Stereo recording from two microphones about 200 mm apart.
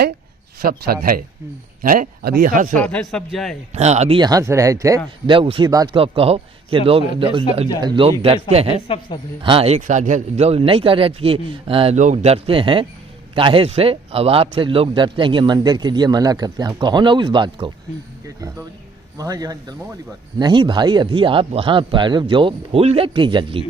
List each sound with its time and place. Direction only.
0.6 s speech: 50° right (ahead or behind)
2.7 s a man's voice: 5° left (ahead or behind)
3.8 s speech: 35° right (ahead or behind)
4.2 s a man's voice: 20° right (ahead or behind)
19.1 s a man's voice: 20° right (ahead or behind)